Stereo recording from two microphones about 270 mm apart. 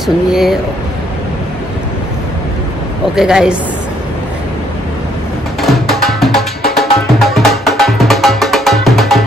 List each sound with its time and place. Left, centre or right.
0.0 s speech: centre
3.2 s speech: centre
5.6 s music: centre